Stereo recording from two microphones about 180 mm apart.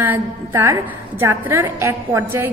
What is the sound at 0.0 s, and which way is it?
A woman's voice, 15° right (ahead or behind).